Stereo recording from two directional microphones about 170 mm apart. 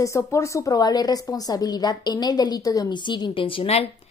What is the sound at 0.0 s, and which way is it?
A woman's voice, 15° left (ahead or behind).